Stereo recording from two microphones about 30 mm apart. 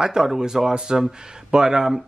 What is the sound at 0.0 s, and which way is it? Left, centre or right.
Speech, right.